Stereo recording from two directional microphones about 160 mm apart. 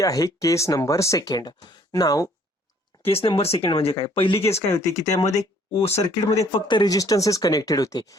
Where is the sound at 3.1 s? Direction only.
35° left (ahead or behind).